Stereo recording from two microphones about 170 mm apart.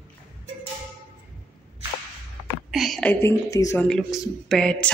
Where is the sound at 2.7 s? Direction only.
Centre (ahead or behind); by 3.8 s 20° left (ahead or behind).